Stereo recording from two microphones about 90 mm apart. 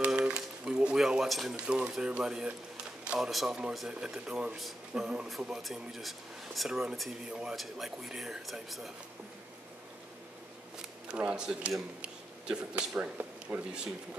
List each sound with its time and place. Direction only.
0.0 s a sound: 10° right (ahead or behind)
3.1 s speech: 5° right (ahead or behind)
10.8 s speech: 10° right (ahead or behind)
13.5 s speech: 25° right (ahead or behind)